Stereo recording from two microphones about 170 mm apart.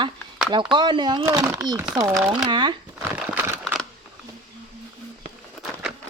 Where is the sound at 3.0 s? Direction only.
15° right (ahead or behind).